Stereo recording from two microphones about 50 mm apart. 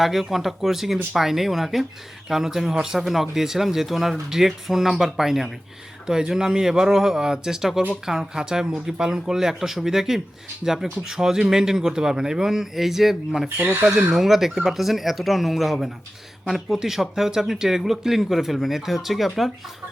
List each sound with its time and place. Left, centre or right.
0.0 s speech: centre
13.6 s speech: right
14.1 s speech: centre